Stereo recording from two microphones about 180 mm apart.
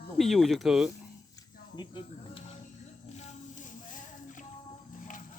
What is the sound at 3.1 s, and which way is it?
Music, 45° left (ahead or behind).